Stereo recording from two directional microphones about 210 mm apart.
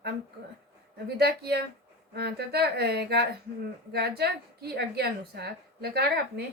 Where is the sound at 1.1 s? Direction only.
50° right (ahead or behind).